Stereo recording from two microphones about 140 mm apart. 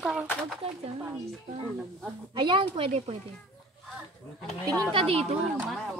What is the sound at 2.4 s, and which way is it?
Speech, 35° right (ahead or behind).